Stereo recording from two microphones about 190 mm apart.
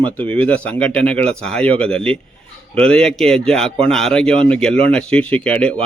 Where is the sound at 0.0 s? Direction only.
10° left (ahead or behind).